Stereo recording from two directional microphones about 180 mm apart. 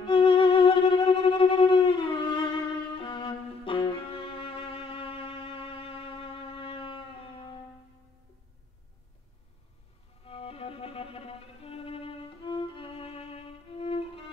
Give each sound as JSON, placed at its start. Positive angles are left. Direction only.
{"t": 0.0, "sound": "violin", "side_deg": 30}
{"t": 3.0, "sound": "music", "side_deg": 25}
{"t": 10.2, "sound": "music", "side_deg": 30}